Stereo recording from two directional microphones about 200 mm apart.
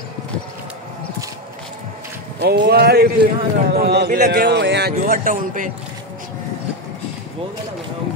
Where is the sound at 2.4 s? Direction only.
55° right (ahead or behind).